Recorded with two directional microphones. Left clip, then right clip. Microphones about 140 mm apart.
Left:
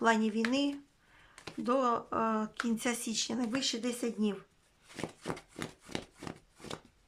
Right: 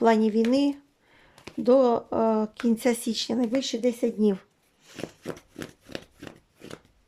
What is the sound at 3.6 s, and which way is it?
Speech, 25° right (ahead or behind).